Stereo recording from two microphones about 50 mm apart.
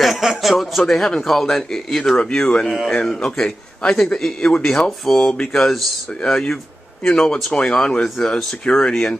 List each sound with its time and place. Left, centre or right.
0.0 s a man's voice: centre
2.6 s a man's voice: centre
3.0 s speech: centre
5.5 s speech: centre